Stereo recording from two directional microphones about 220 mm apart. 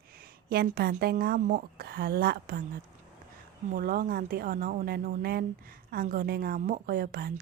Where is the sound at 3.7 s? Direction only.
40° right (ahead or behind).